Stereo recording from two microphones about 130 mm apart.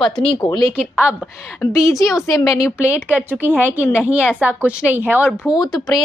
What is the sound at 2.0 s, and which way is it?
Speech, 25° left (ahead or behind).